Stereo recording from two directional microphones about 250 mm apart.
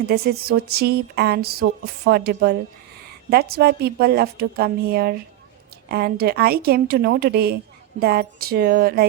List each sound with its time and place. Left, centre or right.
0.1 s a woman's voice: right